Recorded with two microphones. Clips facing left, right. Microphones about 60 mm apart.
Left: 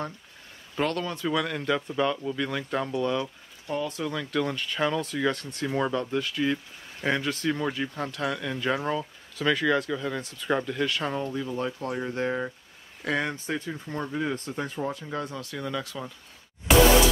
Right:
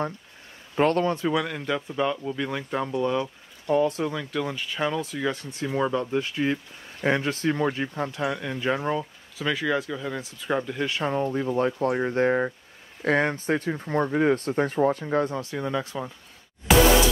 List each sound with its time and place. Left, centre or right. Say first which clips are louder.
0.7 s speech: right 6 dB; right
1.3 s speech: even; centre
3.6 s speech: right 8 dB; right
4.1 s speech: left 1 dB; centre
5.7 s speech: right 2 dB; centre
11.2 s speech: right 6 dB; right